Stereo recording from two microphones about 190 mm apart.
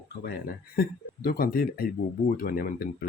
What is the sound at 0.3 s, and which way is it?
Speech, 50° left (ahead or behind).